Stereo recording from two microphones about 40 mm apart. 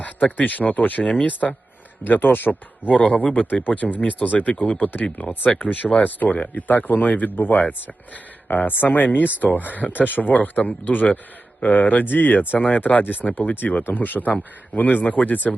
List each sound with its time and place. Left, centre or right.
0.0 s speech: left
2.0 s speech: left